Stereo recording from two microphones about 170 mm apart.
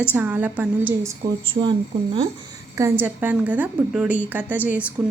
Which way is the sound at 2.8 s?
15° right (ahead or behind).